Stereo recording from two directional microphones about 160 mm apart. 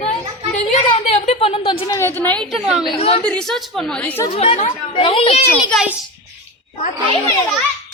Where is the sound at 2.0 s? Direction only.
15° left (ahead or behind); by 2.9 s centre (ahead or behind).